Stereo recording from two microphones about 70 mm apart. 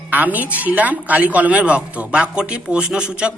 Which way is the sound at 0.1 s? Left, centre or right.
Right.